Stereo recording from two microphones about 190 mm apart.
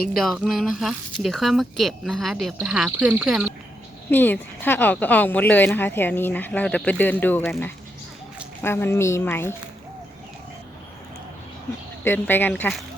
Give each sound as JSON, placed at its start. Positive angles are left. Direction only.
{"t": 0.2, "sound": "speech", "side_deg": 0}
{"t": 4.1, "sound": "speech", "side_deg": 10}
{"t": 8.6, "sound": "speech", "side_deg": 10}
{"t": 12.0, "sound": "speech", "side_deg": 10}